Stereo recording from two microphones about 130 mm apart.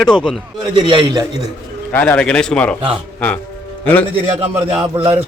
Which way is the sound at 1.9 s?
10° left (ahead or behind).